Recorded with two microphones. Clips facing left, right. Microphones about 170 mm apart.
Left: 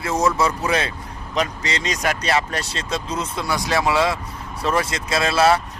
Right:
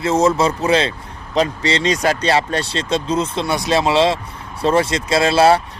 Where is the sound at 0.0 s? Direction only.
25° right (ahead or behind).